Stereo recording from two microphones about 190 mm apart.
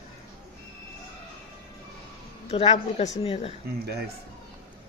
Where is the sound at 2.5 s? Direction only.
35° left (ahead or behind).